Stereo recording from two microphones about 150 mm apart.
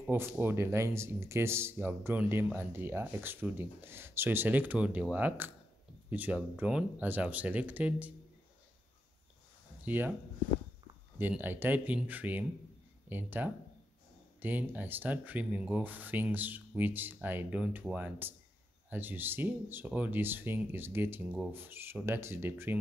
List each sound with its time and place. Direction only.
0.0 s speech: 15° right (ahead or behind)
9.8 s speech: 10° right (ahead or behind)
11.1 s speech: 15° right (ahead or behind)